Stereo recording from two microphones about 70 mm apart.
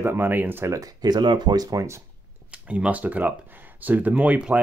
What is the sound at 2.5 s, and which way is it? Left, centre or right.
Speech, centre.